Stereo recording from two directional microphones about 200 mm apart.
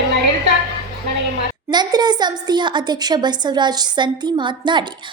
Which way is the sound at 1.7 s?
20° right (ahead or behind).